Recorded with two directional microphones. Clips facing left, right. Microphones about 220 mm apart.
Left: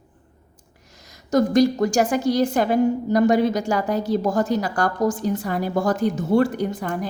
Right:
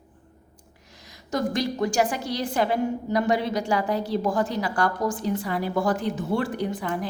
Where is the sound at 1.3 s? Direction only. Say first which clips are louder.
Left 9 dB; 45° left (ahead or behind).